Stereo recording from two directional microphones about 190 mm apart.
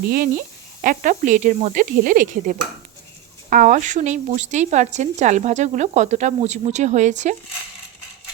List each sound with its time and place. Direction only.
0.1 s speech: 50° right (ahead or behind)